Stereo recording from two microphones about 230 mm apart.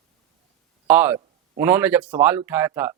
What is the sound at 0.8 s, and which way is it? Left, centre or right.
Speech, centre.